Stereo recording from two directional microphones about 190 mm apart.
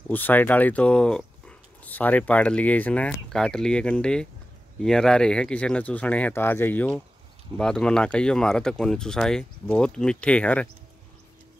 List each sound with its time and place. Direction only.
0.1 s speech: 10° left (ahead or behind)